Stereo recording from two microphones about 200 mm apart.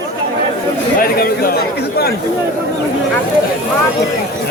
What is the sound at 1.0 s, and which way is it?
Speech, 50° left (ahead or behind).